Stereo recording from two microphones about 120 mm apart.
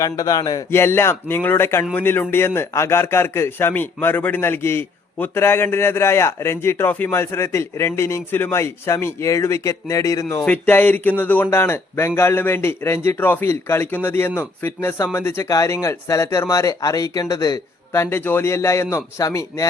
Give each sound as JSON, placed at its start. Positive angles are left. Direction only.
{"t": 0.0, "sound": "speech", "side_deg": 30}
{"t": 0.7, "sound": "a man's voice", "side_deg": 20}
{"t": 10.4, "sound": "a man's voice", "side_deg": 15}